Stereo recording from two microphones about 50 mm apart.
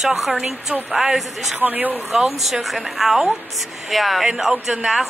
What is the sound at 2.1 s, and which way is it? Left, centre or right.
A woman's voice, centre.